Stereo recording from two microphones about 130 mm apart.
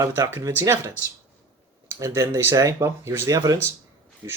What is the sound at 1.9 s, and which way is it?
Speech, 25° right (ahead or behind).